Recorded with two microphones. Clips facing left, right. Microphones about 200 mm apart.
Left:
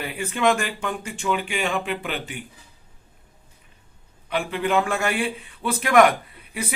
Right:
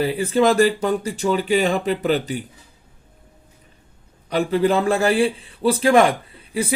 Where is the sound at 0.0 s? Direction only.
35° right (ahead or behind).